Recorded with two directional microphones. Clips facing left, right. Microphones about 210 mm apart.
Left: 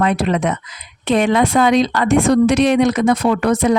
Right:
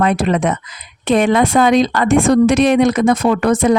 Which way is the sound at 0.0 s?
50° right (ahead or behind).